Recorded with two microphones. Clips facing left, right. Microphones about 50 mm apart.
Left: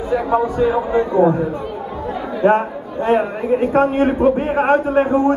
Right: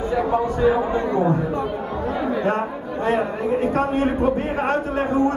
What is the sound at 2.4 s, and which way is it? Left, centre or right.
A man's voice, left.